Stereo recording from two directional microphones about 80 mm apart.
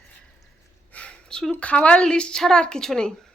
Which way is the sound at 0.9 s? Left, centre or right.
Centre.